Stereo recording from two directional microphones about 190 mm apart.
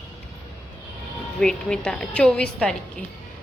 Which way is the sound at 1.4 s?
5° left (ahead or behind).